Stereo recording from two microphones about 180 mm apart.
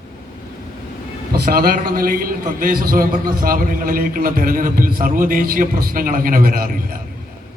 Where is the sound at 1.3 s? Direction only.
55° right (ahead or behind).